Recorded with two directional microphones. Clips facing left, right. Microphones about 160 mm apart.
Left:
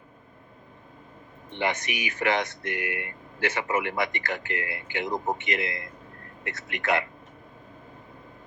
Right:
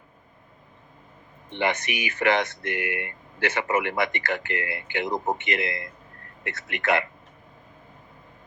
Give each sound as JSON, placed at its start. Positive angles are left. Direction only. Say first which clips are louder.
{"t": 1.5, "sound": "speech", "louder": "right 2 dB", "side_deg": -70}